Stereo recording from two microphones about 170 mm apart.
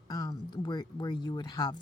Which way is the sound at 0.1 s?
20° left (ahead or behind).